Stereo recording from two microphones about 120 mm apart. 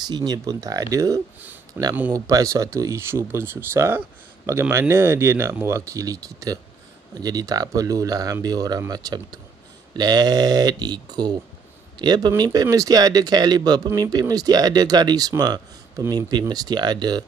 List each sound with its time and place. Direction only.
0.0 s speech: 35° right (ahead or behind)